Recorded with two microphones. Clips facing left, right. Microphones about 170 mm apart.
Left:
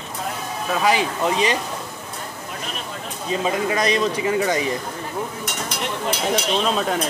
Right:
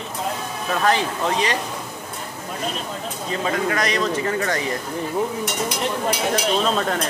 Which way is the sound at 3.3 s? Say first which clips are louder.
Left 1 dB; 20° left (ahead or behind).